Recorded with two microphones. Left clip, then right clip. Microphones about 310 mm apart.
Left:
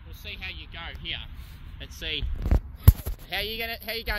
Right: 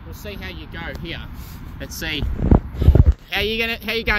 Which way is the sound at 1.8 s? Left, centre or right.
Right.